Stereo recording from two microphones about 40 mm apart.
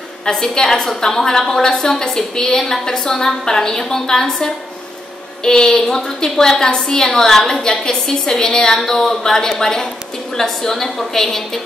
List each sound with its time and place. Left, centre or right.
0.2 s a woman's voice: centre